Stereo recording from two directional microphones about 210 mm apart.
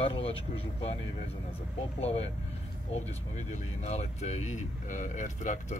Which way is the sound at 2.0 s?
30° left (ahead or behind).